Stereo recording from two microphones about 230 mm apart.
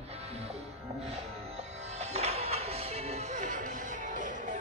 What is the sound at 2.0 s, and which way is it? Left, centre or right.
Music, right.